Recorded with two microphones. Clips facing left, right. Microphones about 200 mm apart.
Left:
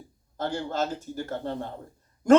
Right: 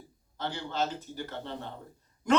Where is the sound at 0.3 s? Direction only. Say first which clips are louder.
Left 4 dB; 45° left (ahead or behind).